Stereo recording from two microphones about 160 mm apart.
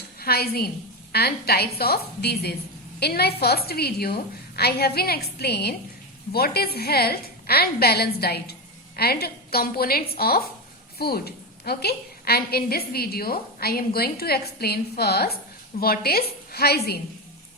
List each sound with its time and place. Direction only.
0.2 s a woman's voice: 75° left (ahead or behind); by 5.7 s 90° left
6.3 s a woman's voice: 75° left (ahead or behind)
15.8 s a woman's voice: 75° left (ahead or behind)